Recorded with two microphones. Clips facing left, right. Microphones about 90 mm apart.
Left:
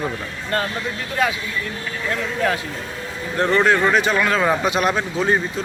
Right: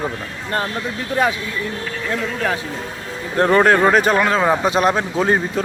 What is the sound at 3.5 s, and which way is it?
Speech, 40° right (ahead or behind).